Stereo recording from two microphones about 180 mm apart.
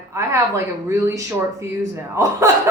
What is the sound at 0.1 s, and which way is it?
A woman's voice, 15° right (ahead or behind).